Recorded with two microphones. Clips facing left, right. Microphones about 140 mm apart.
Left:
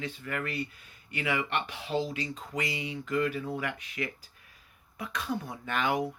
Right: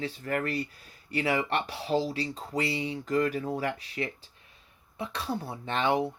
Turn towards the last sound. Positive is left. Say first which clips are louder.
# right 3 dB
turn(degrees=-30)  # may be behind; listen again after turning